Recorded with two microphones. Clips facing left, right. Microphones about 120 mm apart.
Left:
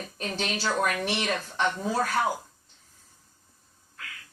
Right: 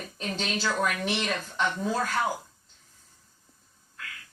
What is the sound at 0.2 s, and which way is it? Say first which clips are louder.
Speech: even; 15° left (ahead or behind).